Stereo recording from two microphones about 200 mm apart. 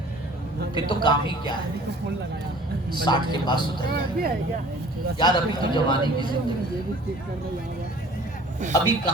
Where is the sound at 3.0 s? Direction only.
20° left (ahead or behind).